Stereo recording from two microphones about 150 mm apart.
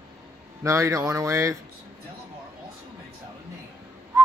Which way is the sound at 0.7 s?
20° right (ahead or behind).